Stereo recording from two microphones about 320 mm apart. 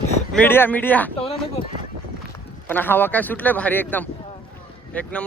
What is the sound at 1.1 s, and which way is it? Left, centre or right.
Speech, centre.